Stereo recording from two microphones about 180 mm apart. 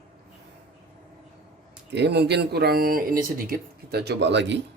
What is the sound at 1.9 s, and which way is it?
Speech, 70° right (ahead or behind).